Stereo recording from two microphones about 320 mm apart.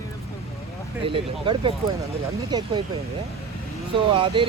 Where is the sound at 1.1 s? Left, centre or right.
Centre.